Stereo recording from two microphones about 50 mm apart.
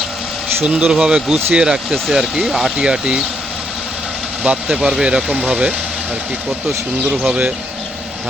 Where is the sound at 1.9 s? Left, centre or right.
Centre.